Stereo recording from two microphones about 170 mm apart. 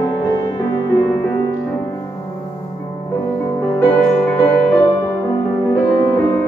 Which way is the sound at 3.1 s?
10° left (ahead or behind).